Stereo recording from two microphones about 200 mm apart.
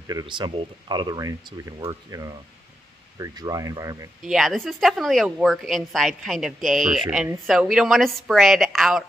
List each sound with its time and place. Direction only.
0.0 s speech: 20° right (ahead or behind)
4.2 s a woman's voice: centre (ahead or behind)